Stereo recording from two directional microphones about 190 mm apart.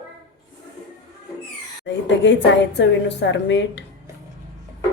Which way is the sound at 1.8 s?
70° left (ahead or behind).